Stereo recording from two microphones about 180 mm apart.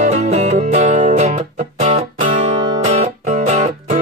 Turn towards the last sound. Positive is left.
turn(degrees=-40)  # may be behind; listen again after turning